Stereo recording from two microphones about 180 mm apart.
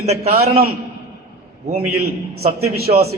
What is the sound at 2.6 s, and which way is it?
Speech, 60° right (ahead or behind).